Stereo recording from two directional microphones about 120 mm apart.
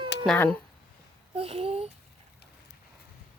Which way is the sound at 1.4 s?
55° right (ahead or behind).